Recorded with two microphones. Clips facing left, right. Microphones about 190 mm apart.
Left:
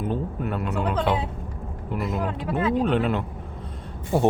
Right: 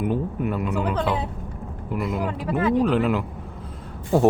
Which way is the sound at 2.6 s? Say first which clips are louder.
Right 3 dB; 5° right (ahead or behind).